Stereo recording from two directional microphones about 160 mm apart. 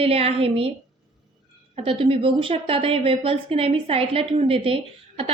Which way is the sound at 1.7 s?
35° right (ahead or behind).